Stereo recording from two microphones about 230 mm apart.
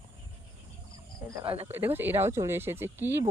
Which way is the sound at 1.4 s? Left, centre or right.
Right.